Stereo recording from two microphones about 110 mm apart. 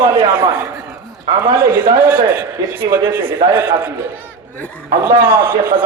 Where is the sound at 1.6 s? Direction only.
20° right (ahead or behind).